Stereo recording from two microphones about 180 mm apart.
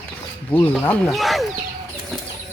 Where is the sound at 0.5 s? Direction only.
10° left (ahead or behind).